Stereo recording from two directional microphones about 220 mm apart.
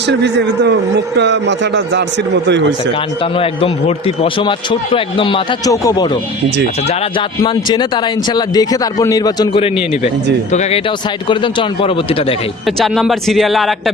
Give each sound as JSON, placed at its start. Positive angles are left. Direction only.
{"t": 0.0, "sound": "a man's voice", "side_deg": -50}
{"t": 3.2, "sound": "speech", "side_deg": 25}
{"t": 12.6, "sound": "a man's voice", "side_deg": 0}